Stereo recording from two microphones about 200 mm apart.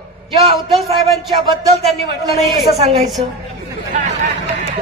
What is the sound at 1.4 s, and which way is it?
Speech, 15° right (ahead or behind).